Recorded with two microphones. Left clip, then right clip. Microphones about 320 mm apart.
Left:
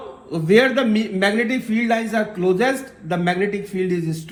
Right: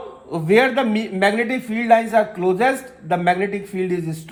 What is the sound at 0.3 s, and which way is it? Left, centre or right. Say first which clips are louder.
A man's voice: even; right.